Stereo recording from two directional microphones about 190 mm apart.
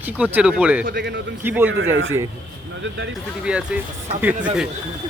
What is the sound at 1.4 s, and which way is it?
Speech, 10° right (ahead or behind).